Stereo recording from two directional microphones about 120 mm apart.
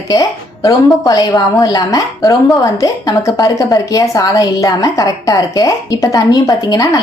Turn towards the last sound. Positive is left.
turn(degrees=30)  # may be behind; listen again after turning